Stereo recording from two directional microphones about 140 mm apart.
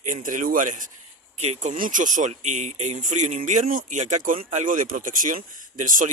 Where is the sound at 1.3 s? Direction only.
55° right (ahead or behind).